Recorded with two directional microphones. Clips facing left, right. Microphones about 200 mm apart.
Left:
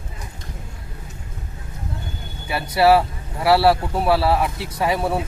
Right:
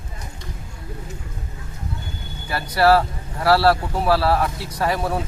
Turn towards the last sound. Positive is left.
turn(degrees=5)  # may be behind; listen again after turning